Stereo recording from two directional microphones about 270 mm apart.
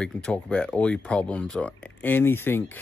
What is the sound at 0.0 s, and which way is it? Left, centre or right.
Speech, centre.